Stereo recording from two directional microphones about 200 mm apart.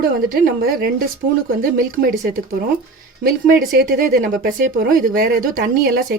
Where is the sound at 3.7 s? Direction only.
45° right (ahead or behind).